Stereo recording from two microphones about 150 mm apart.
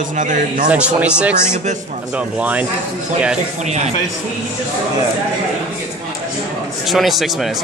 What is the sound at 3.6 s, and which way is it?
Speech, 50° right (ahead or behind).